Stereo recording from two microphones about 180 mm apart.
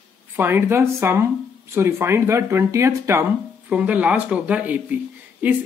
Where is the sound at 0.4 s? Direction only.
10° right (ahead or behind).